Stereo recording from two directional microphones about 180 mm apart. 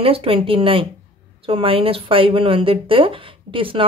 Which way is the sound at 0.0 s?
30° right (ahead or behind).